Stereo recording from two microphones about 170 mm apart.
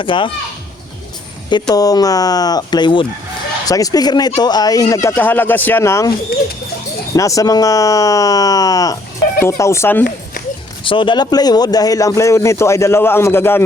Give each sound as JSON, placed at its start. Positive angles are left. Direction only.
{"t": 0.0, "sound": "speech", "side_deg": 30}
{"t": 1.5, "sound": "speech", "side_deg": 25}
{"t": 7.2, "sound": "speech", "side_deg": 20}
{"t": 10.8, "sound": "speech", "side_deg": 30}